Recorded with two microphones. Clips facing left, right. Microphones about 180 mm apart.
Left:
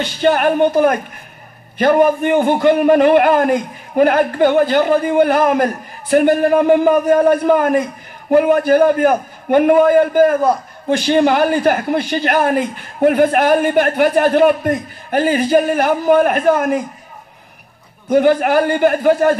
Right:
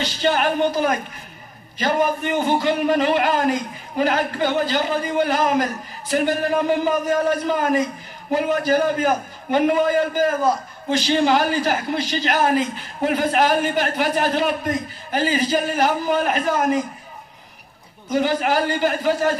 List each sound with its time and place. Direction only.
0.0 s a man's voice: 55° left (ahead or behind)
18.0 s a man's voice: 55° left (ahead or behind)